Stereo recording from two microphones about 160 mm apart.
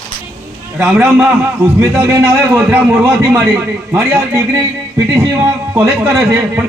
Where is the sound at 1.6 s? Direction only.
15° right (ahead or behind).